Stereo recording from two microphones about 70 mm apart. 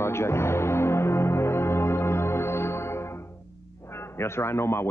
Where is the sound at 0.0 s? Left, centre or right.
Left.